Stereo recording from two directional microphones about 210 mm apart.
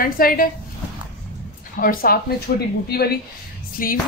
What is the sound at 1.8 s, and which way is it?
A woman's voice, 45° left (ahead or behind).